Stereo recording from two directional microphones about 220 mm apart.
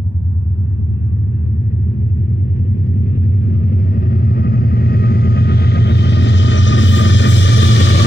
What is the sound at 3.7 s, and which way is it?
Vehicle, 40° left (ahead or behind).